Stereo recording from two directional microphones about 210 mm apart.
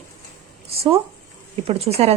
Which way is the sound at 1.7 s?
30° right (ahead or behind).